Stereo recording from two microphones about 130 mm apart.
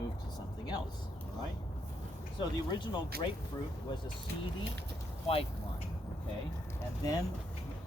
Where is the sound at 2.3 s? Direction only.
35° left (ahead or behind).